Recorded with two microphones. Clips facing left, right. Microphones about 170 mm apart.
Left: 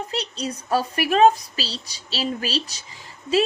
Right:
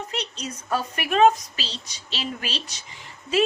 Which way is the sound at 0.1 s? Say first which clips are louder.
Left 4 dB; 35° left (ahead or behind).